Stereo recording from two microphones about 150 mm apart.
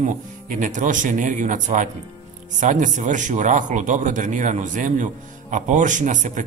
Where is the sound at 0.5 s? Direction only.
60° right (ahead or behind).